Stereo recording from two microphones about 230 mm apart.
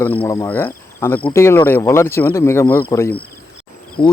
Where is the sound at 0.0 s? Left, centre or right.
Centre.